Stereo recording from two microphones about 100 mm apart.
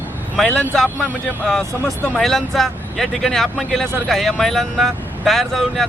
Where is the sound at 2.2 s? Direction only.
5° left (ahead or behind).